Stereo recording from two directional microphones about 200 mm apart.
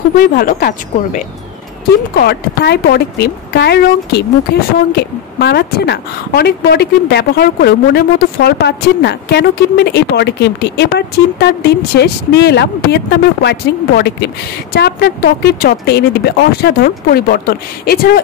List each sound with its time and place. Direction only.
0.2 s a woman's voice: 45° left (ahead or behind)